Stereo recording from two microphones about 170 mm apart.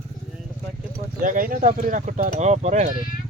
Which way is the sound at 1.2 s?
55° right (ahead or behind).